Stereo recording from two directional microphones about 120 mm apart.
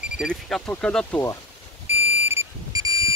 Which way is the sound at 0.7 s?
10° left (ahead or behind).